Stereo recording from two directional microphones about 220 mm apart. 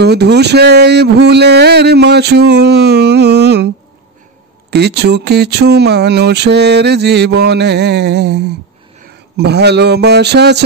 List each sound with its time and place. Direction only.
0.0 s speech: 50° right (ahead or behind)